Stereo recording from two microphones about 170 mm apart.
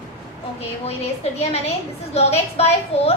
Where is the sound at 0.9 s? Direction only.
40° left (ahead or behind).